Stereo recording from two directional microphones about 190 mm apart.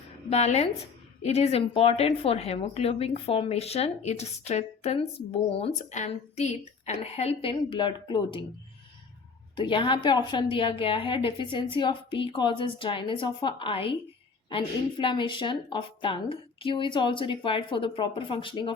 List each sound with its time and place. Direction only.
0.3 s a woman's voice: 35° left (ahead or behind)
9.6 s a woman's voice: 25° left (ahead or behind)